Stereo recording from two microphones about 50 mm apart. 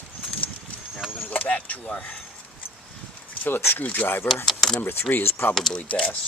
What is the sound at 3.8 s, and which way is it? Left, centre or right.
Speech, left.